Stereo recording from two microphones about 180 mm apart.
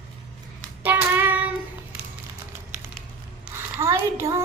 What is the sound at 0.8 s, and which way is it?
Child singing, 10° right (ahead or behind).